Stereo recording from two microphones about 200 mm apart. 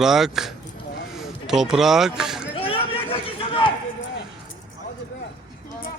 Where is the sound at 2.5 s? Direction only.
30° left (ahead or behind).